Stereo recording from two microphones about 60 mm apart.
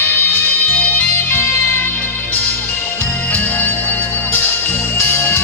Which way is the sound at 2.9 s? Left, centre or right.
Left.